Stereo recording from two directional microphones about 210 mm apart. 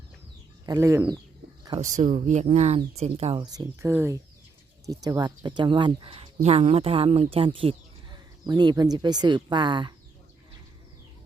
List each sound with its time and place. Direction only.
0.6 s speech: 15° right (ahead or behind)
1.8 s speech: 35° right (ahead or behind)